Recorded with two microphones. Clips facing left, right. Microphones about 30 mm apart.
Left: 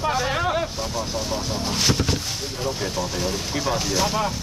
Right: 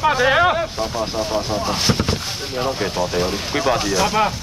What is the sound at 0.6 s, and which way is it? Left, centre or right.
Speech, right.